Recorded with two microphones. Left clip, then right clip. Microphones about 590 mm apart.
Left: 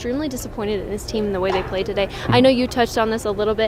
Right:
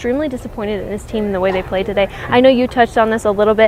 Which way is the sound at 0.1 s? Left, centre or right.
Right.